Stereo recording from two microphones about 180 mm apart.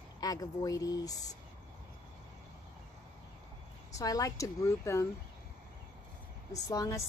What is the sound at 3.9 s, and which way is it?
Speech, 20° left (ahead or behind).